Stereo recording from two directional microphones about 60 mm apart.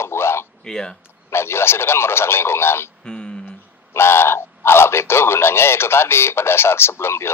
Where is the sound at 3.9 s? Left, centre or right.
Left.